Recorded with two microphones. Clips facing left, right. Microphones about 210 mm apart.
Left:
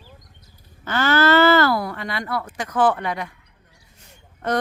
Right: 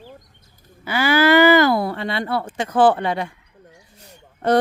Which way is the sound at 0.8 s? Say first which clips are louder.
Right 2 dB; 10° right (ahead or behind).